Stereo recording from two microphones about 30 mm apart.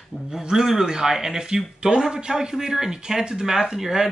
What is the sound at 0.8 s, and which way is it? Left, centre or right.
Speech, right.